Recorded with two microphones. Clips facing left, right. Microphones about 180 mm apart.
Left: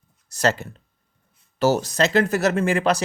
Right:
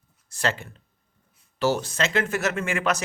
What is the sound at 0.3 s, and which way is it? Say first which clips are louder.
Speech: left 6 dB; 40° left (ahead or behind).